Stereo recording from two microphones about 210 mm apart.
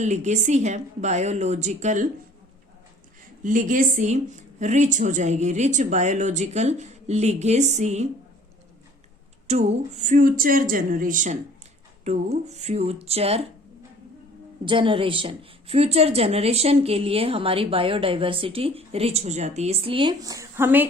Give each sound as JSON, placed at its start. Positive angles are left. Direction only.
{"t": 0.0, "sound": "a woman's voice", "side_deg": -35}
{"t": 3.4, "sound": "a woman's voice", "side_deg": -40}
{"t": 9.5, "sound": "a woman's voice", "side_deg": -30}
{"t": 14.6, "sound": "a woman's voice", "side_deg": -25}